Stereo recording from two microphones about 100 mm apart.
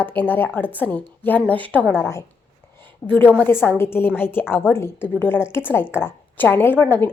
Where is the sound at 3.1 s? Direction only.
15° left (ahead or behind).